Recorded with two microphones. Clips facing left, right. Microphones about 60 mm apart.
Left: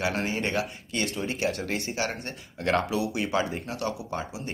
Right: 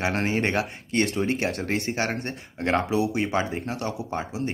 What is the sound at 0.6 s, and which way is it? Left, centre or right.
Speech, right.